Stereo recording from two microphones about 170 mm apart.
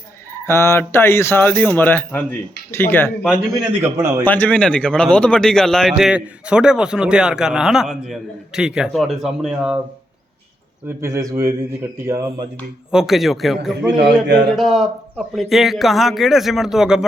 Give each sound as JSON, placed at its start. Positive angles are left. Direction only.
{"t": 0.4, "sound": "speech", "side_deg": 15}
{"t": 3.2, "sound": "speech", "side_deg": -5}
{"t": 4.2, "sound": "a man's voice", "side_deg": 10}
{"t": 10.8, "sound": "speech", "side_deg": -15}
{"t": 12.9, "sound": "a man's voice", "side_deg": -5}